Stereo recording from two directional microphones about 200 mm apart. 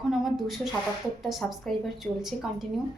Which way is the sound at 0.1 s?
Centre (ahead or behind).